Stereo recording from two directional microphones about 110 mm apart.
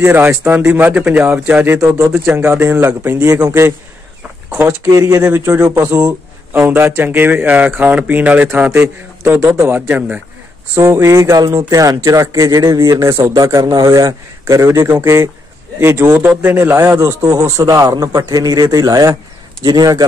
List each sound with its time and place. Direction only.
0.0 s a man's voice: 20° right (ahead or behind)
4.5 s a man's voice: 15° right (ahead or behind)
5.9 s a sound: 15° right (ahead or behind)
6.7 s a man's voice: 20° right (ahead or behind); by 13.5 s 45° right (ahead or behind)
13.5 s a man's voice: 30° right (ahead or behind)